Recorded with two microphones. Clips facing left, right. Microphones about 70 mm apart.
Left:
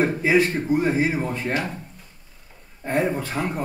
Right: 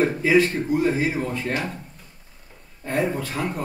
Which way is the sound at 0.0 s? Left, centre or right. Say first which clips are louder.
Right 1 dB; left.